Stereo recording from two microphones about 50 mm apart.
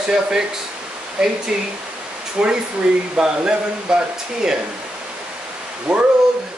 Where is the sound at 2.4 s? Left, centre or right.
Centre.